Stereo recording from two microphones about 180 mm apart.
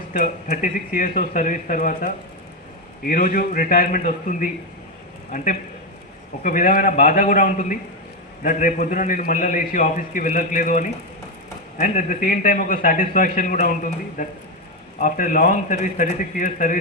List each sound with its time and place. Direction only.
0.1 s a man's voice: 50° left (ahead or behind)
6.4 s a man's voice: 50° left (ahead or behind)